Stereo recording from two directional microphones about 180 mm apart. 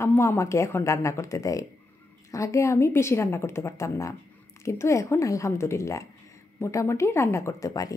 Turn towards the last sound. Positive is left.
turn(degrees=20)  # may be behind; listen again after turning